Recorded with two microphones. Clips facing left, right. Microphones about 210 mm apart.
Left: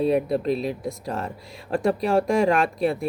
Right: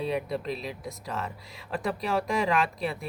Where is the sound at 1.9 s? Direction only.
45° left (ahead or behind).